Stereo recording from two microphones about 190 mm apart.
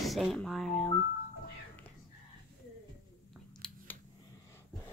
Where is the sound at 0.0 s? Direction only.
Centre (ahead or behind).